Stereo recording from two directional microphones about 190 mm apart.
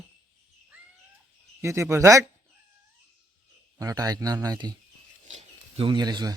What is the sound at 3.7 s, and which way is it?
Speech, 20° right (ahead or behind).